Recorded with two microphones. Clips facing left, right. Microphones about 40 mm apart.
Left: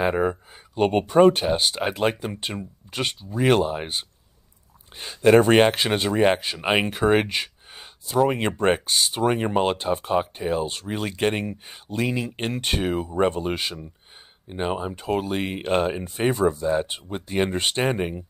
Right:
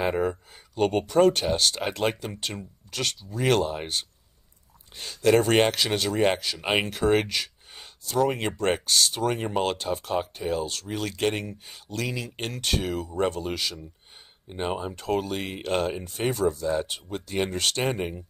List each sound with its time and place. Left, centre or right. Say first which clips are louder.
0.0 s speech: left 3 dB; centre
7.7 s a sound: left 4 dB; centre
8.5 s speech: left 4 dB; left
14.5 s speech: left 3 dB; centre